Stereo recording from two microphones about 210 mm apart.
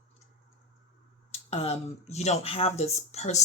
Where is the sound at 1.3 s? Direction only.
30° left (ahead or behind).